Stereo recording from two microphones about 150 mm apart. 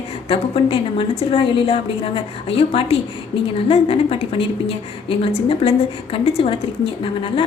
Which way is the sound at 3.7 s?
40° left (ahead or behind).